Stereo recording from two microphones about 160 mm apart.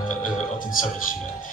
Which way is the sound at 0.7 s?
60° left (ahead or behind).